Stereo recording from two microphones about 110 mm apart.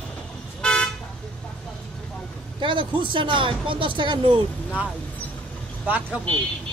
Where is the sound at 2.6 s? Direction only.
50° right (ahead or behind).